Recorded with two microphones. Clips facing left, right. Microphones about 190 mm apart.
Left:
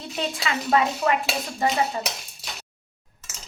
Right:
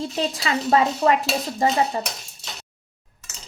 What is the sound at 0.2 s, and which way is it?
Speech, 35° right (ahead or behind).